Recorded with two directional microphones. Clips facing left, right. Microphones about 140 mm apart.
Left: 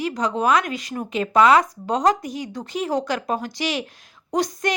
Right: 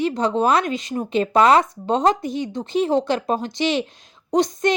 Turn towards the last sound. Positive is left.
turn(degrees=-25)  # may be behind; listen again after turning